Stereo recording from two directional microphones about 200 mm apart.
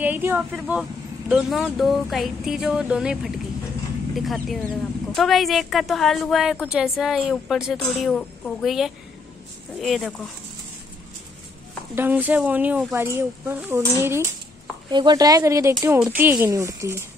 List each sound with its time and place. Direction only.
0.0 s a woman's voice: 10° right (ahead or behind)
11.9 s speech: 10° right (ahead or behind)